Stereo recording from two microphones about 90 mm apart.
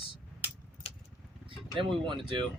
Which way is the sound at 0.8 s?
90° left.